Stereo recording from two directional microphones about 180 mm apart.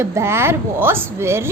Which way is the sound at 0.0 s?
15° right (ahead or behind).